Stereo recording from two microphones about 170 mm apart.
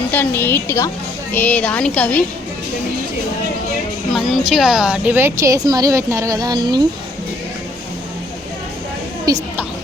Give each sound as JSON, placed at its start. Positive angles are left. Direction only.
{"t": 0.1, "sound": "a woman's voice", "side_deg": 10}
{"t": 4.4, "sound": "a woman's voice", "side_deg": 0}
{"t": 9.3, "sound": "a woman's voice", "side_deg": -20}